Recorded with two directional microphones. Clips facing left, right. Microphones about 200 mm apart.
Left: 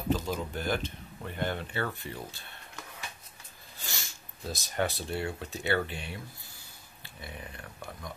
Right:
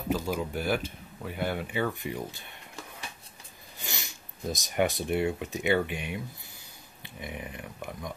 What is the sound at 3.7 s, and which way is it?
Speech, 20° right (ahead or behind).